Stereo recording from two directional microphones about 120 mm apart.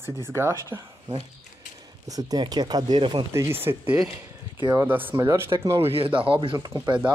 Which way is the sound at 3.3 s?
20° right (ahead or behind).